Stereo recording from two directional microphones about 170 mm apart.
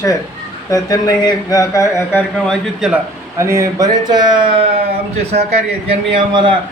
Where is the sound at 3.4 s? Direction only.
15° right (ahead or behind).